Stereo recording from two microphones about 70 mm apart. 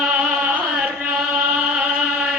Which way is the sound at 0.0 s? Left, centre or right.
Centre.